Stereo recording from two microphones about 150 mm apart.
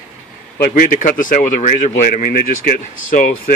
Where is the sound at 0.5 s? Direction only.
70° left (ahead or behind).